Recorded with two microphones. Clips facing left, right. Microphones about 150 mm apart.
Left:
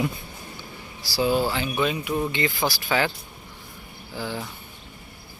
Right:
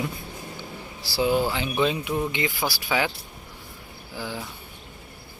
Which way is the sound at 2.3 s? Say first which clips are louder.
Left 2 dB; 15° right (ahead or behind).